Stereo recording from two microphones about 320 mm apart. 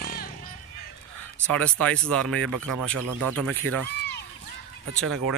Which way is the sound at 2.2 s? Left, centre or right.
Right.